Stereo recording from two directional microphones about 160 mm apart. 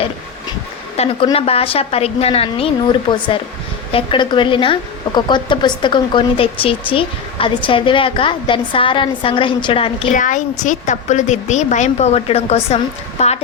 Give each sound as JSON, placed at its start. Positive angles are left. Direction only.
{"t": 0.9, "sound": "a woman's voice", "side_deg": 40}
{"t": 10.1, "sound": "a woman's voice", "side_deg": 55}